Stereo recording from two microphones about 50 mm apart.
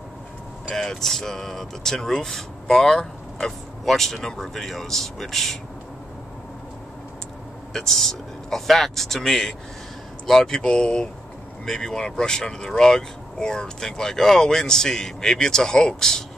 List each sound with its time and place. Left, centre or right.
0.7 s speech: centre
7.7 s speech: centre